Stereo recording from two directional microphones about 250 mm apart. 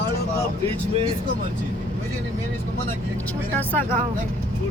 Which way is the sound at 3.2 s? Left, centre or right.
Centre.